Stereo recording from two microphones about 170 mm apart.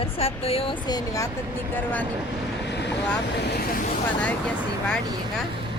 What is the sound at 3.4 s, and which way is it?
Speech, 70° left (ahead or behind).